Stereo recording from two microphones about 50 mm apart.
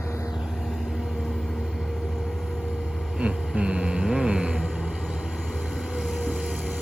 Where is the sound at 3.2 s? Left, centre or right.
Right.